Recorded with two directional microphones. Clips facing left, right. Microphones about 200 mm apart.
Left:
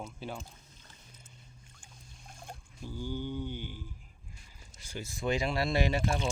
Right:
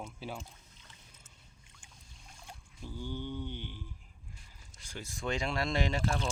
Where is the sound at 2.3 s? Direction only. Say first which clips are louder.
Left 5 dB; 50° left (ahead or behind).